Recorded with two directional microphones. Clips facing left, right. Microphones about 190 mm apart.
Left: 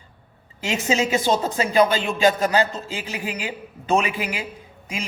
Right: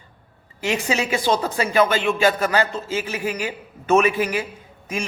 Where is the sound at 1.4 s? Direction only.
20° left (ahead or behind).